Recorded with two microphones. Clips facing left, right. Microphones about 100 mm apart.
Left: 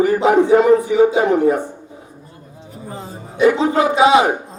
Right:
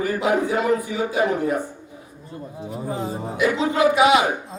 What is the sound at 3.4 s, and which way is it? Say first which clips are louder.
Speech: left 6 dB; 30° left (ahead or behind).